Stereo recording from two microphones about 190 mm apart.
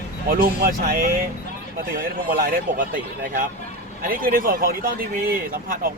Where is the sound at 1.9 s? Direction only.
45° right (ahead or behind).